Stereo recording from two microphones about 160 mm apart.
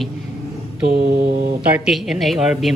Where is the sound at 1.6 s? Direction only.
5° right (ahead or behind).